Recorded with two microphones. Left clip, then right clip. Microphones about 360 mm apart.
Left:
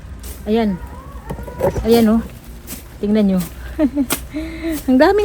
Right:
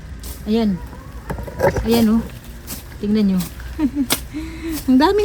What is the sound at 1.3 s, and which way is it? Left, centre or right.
Vehicle, centre.